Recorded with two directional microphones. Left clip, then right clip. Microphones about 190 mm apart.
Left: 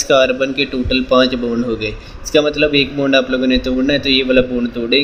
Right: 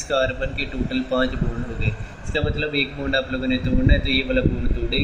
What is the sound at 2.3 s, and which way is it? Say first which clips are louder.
A man's voice: left 11 dB; 60° left (ahead or behind).